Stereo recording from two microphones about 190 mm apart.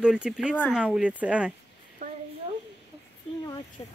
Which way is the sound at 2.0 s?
45° right (ahead or behind).